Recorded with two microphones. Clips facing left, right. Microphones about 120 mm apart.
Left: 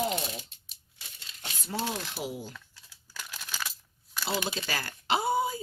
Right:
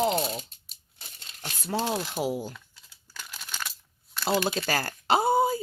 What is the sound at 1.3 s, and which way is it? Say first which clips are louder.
Crumpling: right 5 dB; 55° right (ahead or behind).